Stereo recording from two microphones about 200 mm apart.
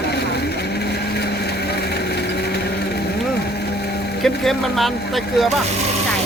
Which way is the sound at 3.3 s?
55° left (ahead or behind).